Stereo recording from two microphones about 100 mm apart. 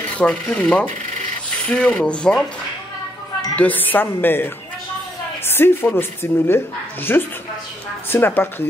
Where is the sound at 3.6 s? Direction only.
15° left (ahead or behind).